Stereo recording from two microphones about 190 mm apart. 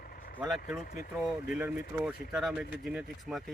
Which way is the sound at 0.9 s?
50° left (ahead or behind).